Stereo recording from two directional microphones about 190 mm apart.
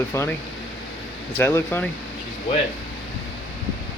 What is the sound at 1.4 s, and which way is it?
Speech, 15° left (ahead or behind).